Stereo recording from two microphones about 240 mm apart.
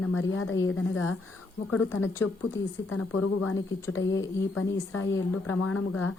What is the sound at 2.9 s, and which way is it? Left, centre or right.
A woman's voice, left.